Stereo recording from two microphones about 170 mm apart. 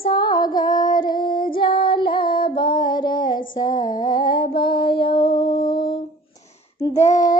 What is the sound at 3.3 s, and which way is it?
Female singing, 25° left (ahead or behind).